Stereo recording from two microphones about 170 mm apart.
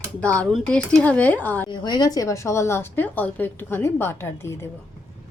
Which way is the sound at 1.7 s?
25° left (ahead or behind).